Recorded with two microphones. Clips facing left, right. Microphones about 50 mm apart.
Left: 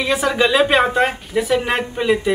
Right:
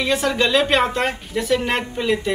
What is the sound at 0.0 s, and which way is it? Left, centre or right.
Speech, centre.